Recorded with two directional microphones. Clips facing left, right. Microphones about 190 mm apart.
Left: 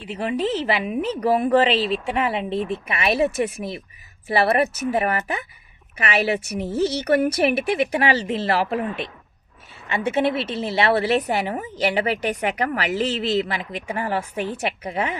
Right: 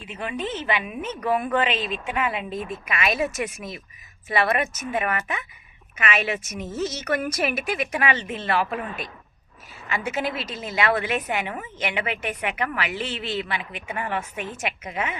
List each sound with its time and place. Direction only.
0.0 s a woman's voice: 35° left (ahead or behind)